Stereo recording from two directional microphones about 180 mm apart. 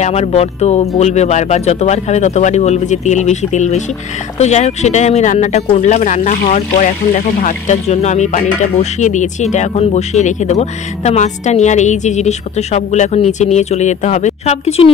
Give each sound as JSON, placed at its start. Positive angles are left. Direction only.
{"t": 0.0, "sound": "speech", "side_deg": 40}